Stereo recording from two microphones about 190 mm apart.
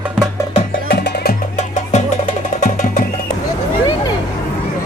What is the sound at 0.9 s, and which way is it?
Music, 60° left (ahead or behind).